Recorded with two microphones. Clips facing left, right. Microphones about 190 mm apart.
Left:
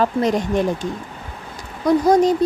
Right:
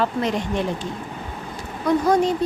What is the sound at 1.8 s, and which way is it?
Speech, 40° left (ahead or behind).